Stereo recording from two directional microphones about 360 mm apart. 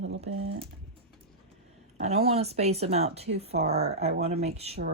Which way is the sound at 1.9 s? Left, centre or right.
Centre.